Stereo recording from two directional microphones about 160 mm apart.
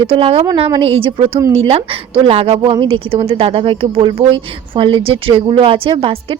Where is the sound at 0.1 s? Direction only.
35° right (ahead or behind).